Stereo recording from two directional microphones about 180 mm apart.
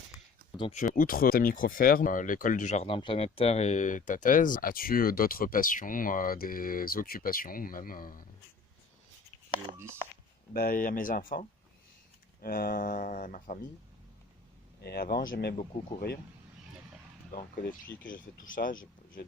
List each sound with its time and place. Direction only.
0.9 s speech: 55° left (ahead or behind)
9.7 s speech: 15° right (ahead or behind)
10.5 s speech: 55° left (ahead or behind)
14.8 s speech: 60° left (ahead or behind)
15.5 s speech: 40° left (ahead or behind)
17.3 s speech: 50° left (ahead or behind)